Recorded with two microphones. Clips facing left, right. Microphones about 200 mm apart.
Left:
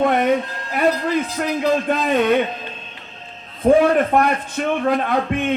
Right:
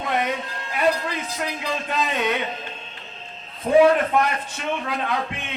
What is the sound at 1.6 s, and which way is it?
Speech, 50° left (ahead or behind).